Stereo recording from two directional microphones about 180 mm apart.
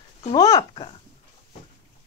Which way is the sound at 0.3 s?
20° left (ahead or behind).